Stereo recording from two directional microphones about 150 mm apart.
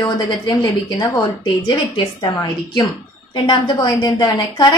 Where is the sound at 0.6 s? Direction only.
25° left (ahead or behind).